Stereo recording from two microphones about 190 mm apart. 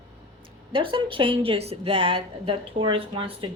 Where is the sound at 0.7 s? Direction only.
25° right (ahead or behind).